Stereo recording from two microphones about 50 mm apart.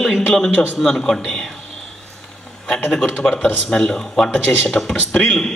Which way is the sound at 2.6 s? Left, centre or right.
Centre.